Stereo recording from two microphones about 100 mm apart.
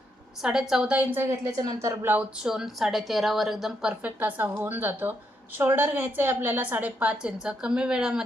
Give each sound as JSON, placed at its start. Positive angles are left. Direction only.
{"t": 0.4, "sound": "a woman's voice", "side_deg": -5}
{"t": 1.2, "sound": "speech", "side_deg": -30}
{"t": 2.4, "sound": "a woman's voice", "side_deg": -5}
{"t": 4.2, "sound": "a woman's voice", "side_deg": -20}